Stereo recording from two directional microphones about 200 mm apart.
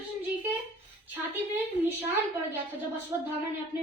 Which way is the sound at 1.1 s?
10° right (ahead or behind).